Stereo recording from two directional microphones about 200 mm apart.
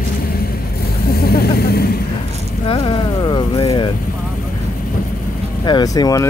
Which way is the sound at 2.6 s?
25° left (ahead or behind).